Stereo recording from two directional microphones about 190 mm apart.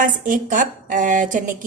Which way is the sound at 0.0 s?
45° right (ahead or behind).